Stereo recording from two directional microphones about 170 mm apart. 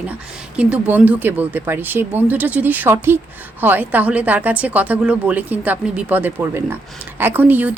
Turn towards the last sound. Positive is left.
turn(degrees=-10)  # may be behind; listen again after turning